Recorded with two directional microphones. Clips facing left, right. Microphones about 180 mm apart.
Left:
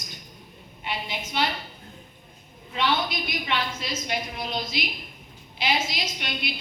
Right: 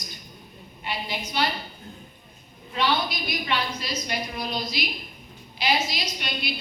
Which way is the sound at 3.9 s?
25° left (ahead or behind).